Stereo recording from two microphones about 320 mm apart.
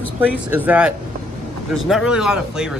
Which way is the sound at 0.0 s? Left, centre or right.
Centre.